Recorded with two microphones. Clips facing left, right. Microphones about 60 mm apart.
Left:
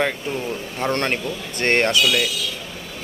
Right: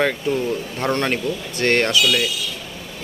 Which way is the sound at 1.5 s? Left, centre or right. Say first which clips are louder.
Even; left.